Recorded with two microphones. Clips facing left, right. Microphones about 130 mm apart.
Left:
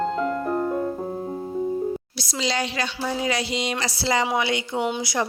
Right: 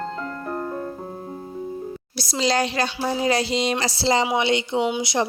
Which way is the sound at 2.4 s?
40° right (ahead or behind).